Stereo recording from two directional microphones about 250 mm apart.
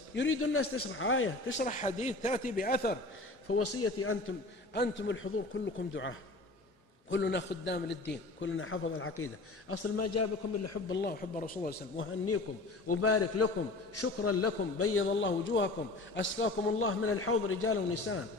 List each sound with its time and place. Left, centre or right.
0.1 s a man's voice: left
1.6 s a man's voice: left
3.4 s a man's voice: left
4.7 s a man's voice: left
10.9 s a man's voice: left
12.9 s a man's voice: left